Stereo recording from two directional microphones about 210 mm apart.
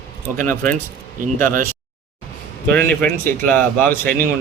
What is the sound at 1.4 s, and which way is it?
Speech, 40° right (ahead or behind).